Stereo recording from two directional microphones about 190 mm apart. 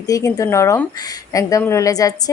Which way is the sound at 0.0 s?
20° left (ahead or behind).